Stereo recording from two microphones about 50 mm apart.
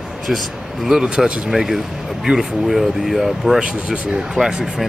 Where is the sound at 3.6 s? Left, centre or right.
Centre.